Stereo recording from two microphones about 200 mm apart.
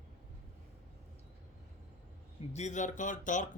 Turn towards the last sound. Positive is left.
turn(degrees=40)  # may be behind; listen again after turning